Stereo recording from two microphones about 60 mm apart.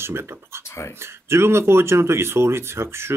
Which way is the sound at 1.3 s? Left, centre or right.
Right.